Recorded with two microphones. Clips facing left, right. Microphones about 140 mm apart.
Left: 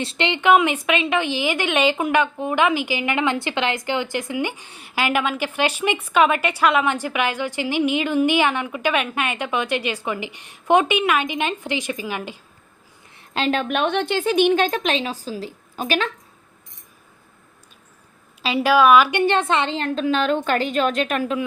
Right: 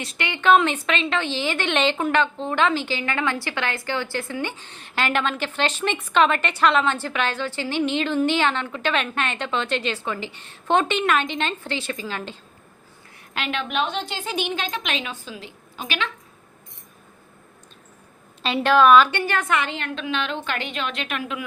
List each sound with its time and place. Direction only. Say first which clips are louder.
0.0 s speech: left 3 dB; 25° left (ahead or behind)
0.5 s a woman's voice: even; 10° left (ahead or behind)
13.3 s speech: left 5 dB; 35° left (ahead or behind)
14.8 s a woman's voice: left 6 dB; 35° left (ahead or behind)
18.4 s a woman's voice: left 1 dB; 5° left (ahead or behind)
19.2 s a woman's voice: left 5 dB; 25° left (ahead or behind)